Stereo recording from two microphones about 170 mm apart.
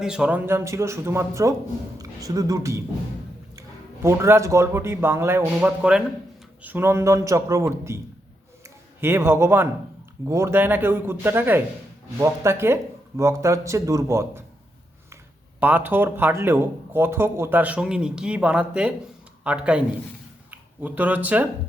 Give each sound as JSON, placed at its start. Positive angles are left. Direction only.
{"t": 0.0, "sound": "speech", "side_deg": -5}
{"t": 4.0, "sound": "speech", "side_deg": -15}
{"t": 15.6, "sound": "speech", "side_deg": -10}